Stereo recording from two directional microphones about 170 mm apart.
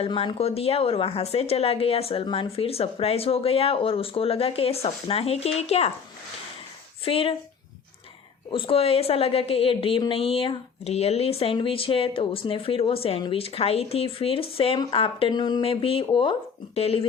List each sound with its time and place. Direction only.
0.0 s a woman's voice: 30° left (ahead or behind)
7.0 s a woman's voice: 30° left (ahead or behind)
8.5 s a woman's voice: 35° left (ahead or behind)